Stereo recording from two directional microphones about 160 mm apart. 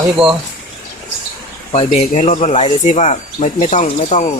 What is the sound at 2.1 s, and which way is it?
Speech, 50° left (ahead or behind).